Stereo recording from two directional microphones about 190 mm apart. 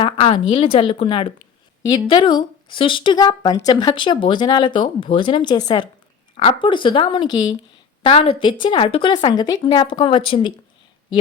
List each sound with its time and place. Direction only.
0.0 s speech: 30° left (ahead or behind)